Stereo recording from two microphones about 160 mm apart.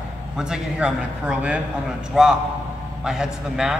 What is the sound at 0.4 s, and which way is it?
A man's voice, 5° right (ahead or behind).